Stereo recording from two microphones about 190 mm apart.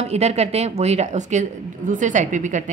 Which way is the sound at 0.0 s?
35° right (ahead or behind).